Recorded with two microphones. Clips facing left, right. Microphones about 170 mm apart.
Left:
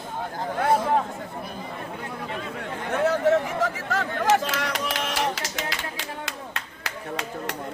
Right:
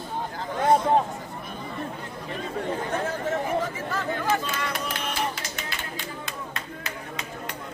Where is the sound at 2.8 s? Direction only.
75° left (ahead or behind).